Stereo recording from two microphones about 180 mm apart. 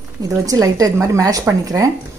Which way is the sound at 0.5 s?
20° right (ahead or behind).